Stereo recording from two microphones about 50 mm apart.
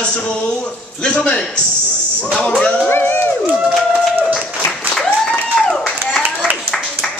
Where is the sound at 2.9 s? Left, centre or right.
Left.